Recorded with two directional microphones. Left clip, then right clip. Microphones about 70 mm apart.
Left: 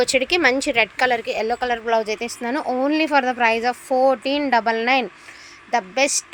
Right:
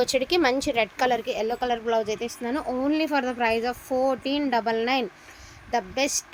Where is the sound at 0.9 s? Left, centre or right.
Centre; by 2.9 s left.